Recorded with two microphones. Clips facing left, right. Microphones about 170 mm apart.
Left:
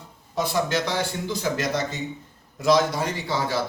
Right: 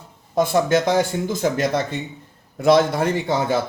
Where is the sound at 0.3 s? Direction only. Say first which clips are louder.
Right 7 dB; 50° right (ahead or behind).